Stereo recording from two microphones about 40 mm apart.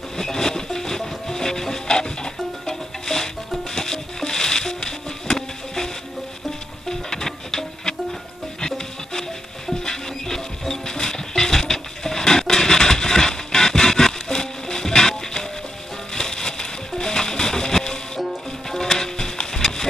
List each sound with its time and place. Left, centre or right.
0.2 s wood: centre
3.7 s music: centre
6.9 s music: centre